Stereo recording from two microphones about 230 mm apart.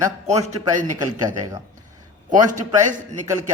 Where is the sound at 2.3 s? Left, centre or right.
Right.